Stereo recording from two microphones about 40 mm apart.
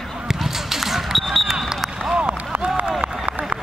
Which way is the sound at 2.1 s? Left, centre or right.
Right.